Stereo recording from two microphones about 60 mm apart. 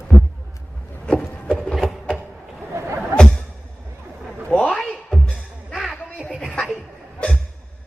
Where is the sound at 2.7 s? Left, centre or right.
Right.